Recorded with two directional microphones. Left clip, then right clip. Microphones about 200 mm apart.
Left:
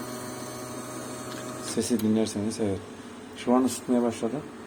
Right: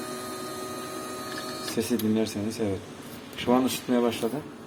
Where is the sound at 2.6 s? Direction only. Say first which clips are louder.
Even; 10° left (ahead or behind).